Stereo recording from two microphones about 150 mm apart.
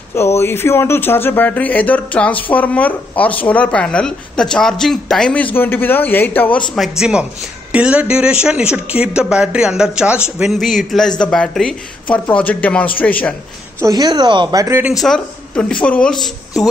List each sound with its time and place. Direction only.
0.1 s speech: 15° left (ahead or behind)
6.7 s speech: centre (ahead or behind)
13.7 s speech: 25° right (ahead or behind)
14.8 s speech: 5° right (ahead or behind)